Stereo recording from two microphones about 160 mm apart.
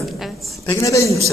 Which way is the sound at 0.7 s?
20° left (ahead or behind).